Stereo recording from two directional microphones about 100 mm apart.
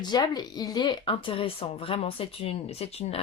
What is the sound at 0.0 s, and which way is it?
Speech, 45° left (ahead or behind).